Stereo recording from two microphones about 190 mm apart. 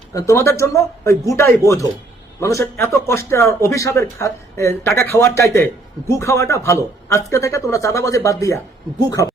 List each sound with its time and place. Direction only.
0.1 s a man's voice: 15° left (ahead or behind)